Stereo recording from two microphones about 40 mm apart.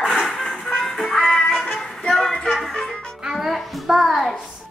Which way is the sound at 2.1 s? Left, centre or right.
Centre.